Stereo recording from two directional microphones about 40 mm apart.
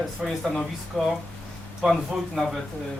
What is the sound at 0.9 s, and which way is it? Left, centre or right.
Speech, centre.